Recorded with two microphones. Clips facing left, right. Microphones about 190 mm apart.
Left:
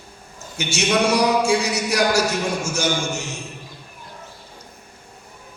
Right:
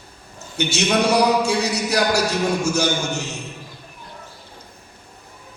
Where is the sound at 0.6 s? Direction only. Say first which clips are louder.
Right 1 dB; 65° right (ahead or behind).